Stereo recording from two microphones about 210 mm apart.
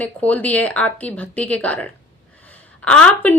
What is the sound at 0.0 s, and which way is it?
A woman's voice, 5° left (ahead or behind).